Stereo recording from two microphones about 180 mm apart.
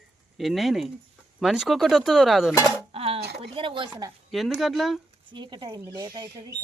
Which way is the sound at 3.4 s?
30° right (ahead or behind).